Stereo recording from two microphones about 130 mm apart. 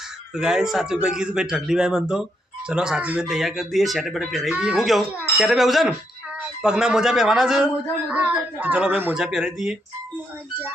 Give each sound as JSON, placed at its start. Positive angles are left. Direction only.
{"t": 0.3, "sound": "speech", "side_deg": -5}